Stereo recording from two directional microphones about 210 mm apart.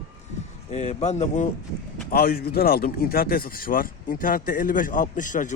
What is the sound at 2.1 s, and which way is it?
Speech, 45° left (ahead or behind).